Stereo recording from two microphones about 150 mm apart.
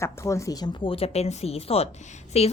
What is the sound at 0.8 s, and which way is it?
Speech, 40° left (ahead or behind).